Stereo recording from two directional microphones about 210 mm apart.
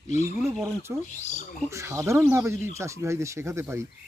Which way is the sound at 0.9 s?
10° right (ahead or behind).